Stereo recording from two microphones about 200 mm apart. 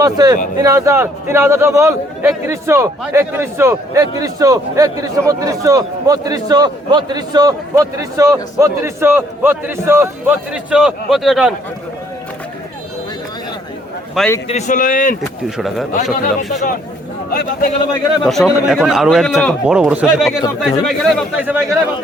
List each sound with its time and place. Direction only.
0.0 s a man's voice: 20° right (ahead or behind); by 11.5 s centre (ahead or behind)
14.2 s a man's voice: 10° left (ahead or behind)
14.4 s a man's voice: 35° left (ahead or behind)
15.4 s a man's voice: centre (ahead or behind)
16.5 s a man's voice: 40° left (ahead or behind)
18.2 s a man's voice: centre (ahead or behind)
21.4 s a man's voice: 10° right (ahead or behind)